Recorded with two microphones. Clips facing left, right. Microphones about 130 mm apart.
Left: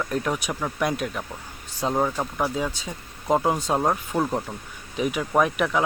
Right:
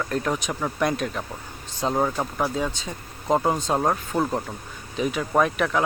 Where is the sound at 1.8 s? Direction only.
5° right (ahead or behind).